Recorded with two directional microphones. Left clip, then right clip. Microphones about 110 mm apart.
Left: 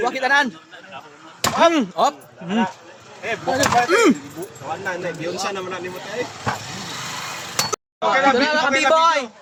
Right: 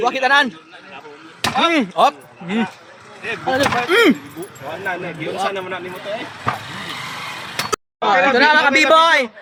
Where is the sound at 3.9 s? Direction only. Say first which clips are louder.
Right 5 dB; 10° left (ahead or behind).